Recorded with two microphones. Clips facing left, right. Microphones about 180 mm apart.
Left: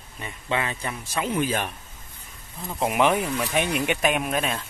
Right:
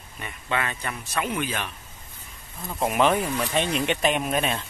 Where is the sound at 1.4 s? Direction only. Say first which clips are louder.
Left 4 dB; 35° left (ahead or behind).